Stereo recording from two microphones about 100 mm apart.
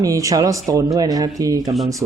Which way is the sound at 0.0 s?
35° right (ahead or behind).